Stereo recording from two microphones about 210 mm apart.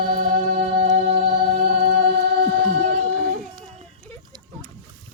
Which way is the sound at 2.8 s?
35° right (ahead or behind).